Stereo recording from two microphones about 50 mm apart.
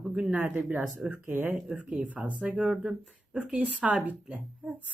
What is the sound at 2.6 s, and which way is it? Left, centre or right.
Speech, centre.